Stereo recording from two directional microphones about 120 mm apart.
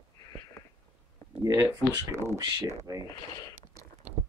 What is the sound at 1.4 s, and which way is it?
Speech, 30° right (ahead or behind).